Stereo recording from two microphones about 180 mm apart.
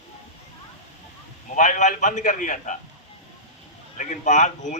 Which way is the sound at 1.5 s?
45° left (ahead or behind).